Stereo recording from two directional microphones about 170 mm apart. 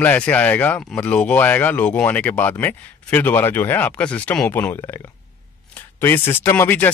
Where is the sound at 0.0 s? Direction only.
10° left (ahead or behind).